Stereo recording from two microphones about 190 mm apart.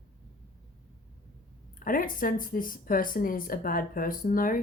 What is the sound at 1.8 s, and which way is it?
Speech, 45° left (ahead or behind).